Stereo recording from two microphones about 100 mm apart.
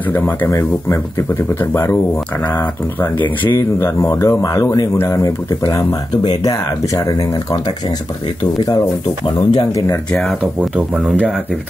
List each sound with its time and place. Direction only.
0.5 s speech: 30° left (ahead or behind)
3.5 s speech: 30° left (ahead or behind)
9.5 s speech: 40° left (ahead or behind)